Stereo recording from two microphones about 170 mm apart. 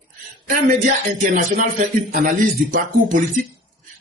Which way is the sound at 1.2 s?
45° right (ahead or behind).